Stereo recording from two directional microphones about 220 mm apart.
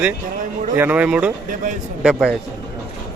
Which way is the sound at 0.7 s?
10° right (ahead or behind).